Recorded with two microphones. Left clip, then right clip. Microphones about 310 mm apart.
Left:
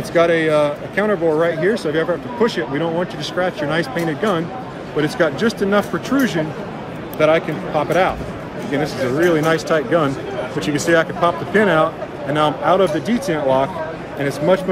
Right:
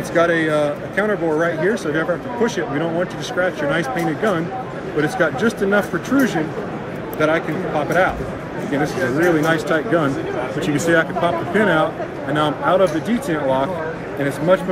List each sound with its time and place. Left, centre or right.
0.1 s a man's voice: centre
9.4 s speech: centre